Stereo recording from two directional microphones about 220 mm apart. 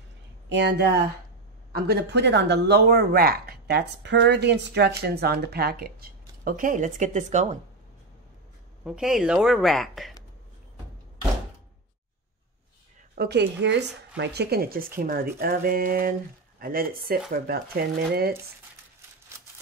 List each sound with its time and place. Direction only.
0.5 s speech: 50° right (ahead or behind); by 7.5 s 35° right (ahead or behind)
8.8 s a woman's voice: 5° right (ahead or behind)
13.1 s speech: 45° right (ahead or behind)